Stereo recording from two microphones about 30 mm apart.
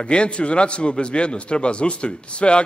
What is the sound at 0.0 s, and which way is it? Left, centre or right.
A man's voice, left.